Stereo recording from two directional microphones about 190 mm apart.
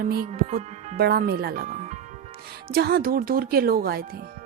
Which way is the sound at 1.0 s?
55° right (ahead or behind).